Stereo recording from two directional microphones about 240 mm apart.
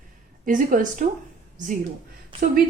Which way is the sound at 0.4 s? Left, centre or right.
Right.